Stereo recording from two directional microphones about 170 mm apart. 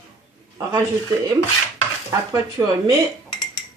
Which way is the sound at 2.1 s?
20° right (ahead or behind).